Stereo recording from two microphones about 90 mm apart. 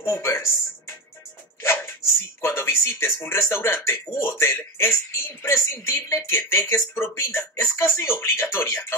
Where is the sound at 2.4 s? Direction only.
30° left (ahead or behind).